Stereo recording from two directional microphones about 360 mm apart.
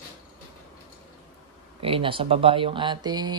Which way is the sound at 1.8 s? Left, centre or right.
Centre.